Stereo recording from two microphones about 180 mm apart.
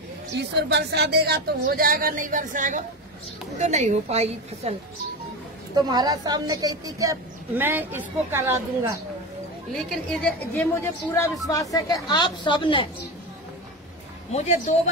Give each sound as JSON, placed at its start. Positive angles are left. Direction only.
{"t": 0.4, "sound": "a woman's voice", "side_deg": -70}
{"t": 5.8, "sound": "a woman's voice", "side_deg": -20}
{"t": 10.2, "sound": "a woman's voice", "side_deg": 10}
{"t": 14.3, "sound": "speech", "side_deg": 35}